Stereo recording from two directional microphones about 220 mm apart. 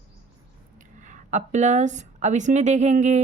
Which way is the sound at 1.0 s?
35° right (ahead or behind).